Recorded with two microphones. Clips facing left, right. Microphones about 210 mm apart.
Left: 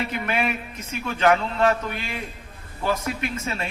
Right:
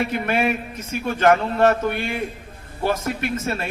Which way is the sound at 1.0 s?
45° right (ahead or behind).